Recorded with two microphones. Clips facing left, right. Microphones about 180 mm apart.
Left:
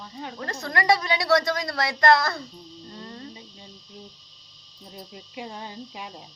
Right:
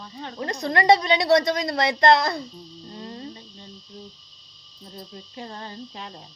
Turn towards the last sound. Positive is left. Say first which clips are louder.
# right 1 dB
turn(degrees=10)  # may be behind; listen again after turning